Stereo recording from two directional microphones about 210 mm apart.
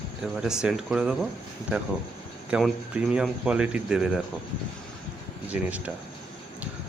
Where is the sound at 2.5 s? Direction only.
5° right (ahead or behind).